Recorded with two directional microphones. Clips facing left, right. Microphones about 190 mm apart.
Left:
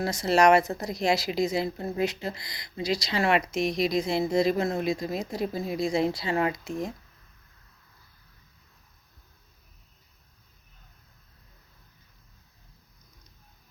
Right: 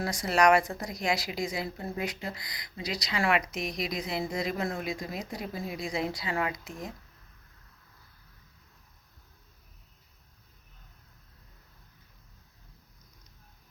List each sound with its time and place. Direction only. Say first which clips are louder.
0.0 s a woman's voice: left 3 dB; 25° left (ahead or behind)